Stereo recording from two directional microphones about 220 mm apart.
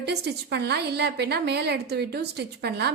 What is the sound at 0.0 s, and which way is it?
A woman's voice, 50° right (ahead or behind).